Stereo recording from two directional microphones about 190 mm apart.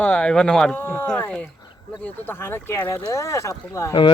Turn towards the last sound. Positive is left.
turn(degrees=20)  # may be behind; listen again after turning